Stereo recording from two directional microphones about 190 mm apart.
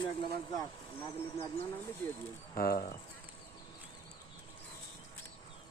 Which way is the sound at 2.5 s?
50° left (ahead or behind).